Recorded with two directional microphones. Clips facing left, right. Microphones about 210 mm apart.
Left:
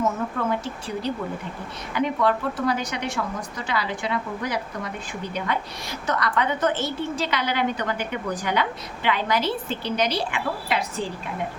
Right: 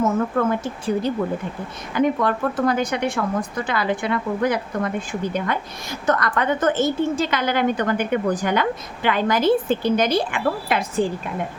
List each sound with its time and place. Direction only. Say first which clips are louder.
0.3 s speech: right 5 dB; 50° right (ahead or behind)